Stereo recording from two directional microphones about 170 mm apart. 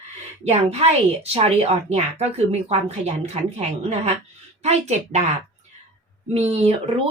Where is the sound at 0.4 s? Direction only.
40° right (ahead or behind).